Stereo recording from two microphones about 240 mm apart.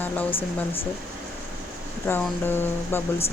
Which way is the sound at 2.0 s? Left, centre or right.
Centre.